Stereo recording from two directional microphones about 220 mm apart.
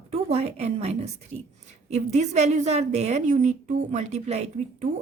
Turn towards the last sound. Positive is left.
turn(degrees=-30)  # may be behind; listen again after turning